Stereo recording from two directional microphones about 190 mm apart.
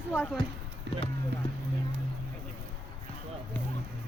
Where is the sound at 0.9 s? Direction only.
65° right (ahead or behind).